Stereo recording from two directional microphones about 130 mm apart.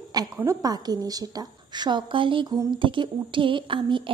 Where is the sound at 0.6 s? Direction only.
30° right (ahead or behind).